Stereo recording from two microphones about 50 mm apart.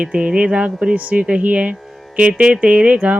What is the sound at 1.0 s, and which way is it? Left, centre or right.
A woman's voice, right.